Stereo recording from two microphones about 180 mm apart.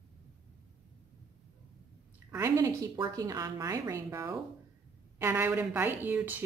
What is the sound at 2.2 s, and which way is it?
A woman's voice, 15° right (ahead or behind).